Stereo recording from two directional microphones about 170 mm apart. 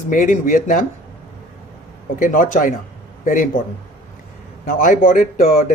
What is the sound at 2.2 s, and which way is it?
Speech, 55° left (ahead or behind).